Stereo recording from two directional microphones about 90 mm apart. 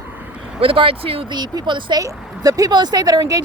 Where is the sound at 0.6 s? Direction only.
85° right.